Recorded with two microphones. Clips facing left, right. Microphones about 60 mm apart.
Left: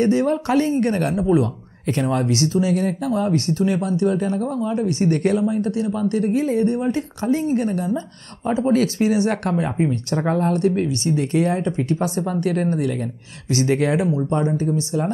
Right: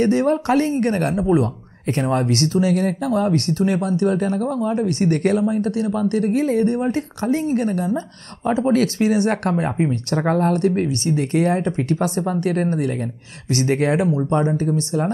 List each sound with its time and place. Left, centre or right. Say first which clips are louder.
0.0 s speech: right 1 dB; right